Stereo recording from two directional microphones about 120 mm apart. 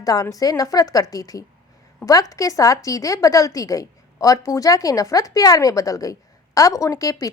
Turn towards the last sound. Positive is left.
turn(degrees=30)  # may be behind; listen again after turning